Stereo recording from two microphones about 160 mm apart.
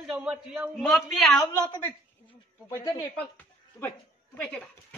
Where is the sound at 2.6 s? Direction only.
20° left (ahead or behind).